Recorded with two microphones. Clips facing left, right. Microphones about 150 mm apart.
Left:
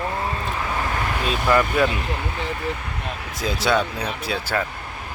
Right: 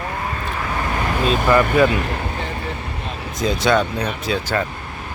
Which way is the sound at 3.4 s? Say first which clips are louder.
Right 4 dB; 5° left (ahead or behind).